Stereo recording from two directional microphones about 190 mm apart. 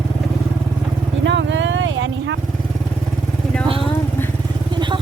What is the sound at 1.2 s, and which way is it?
Vehicle, 70° right (ahead or behind).